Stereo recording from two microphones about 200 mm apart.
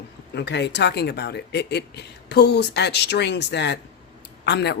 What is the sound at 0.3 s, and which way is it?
Speech, 55° left (ahead or behind).